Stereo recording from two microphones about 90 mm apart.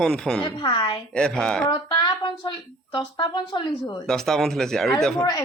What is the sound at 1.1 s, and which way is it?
Speech, 10° left (ahead or behind).